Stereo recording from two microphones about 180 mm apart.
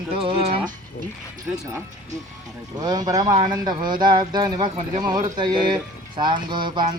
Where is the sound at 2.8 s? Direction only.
20° right (ahead or behind).